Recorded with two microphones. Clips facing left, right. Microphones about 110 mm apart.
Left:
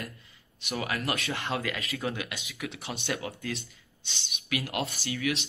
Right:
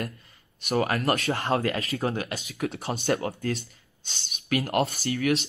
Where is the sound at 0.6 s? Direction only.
45° right (ahead or behind).